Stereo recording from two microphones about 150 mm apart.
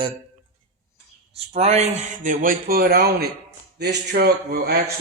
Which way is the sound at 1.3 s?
45° right (ahead or behind).